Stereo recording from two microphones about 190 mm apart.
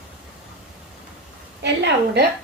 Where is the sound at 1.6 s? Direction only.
65° right (ahead or behind).